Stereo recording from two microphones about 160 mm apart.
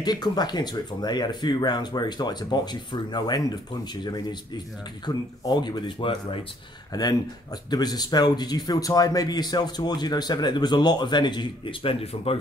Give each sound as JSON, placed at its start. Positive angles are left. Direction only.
{"t": 0.0, "sound": "a man's voice", "side_deg": 25}